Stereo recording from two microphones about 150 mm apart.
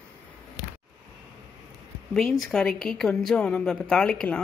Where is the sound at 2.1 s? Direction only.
Centre (ahead or behind).